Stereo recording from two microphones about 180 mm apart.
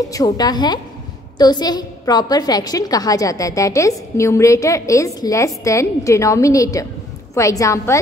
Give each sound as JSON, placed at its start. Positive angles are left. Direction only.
{"t": 0.1, "sound": "a woman's voice", "side_deg": 20}